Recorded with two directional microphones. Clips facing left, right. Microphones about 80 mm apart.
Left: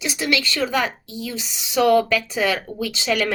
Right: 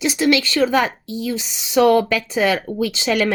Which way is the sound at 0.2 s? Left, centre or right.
Right.